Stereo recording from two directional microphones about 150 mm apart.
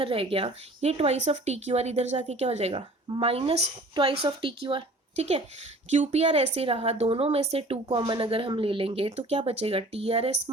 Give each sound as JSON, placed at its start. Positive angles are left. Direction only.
{"t": 0.0, "sound": "speech", "side_deg": -40}
{"t": 7.9, "sound": "speech", "side_deg": -30}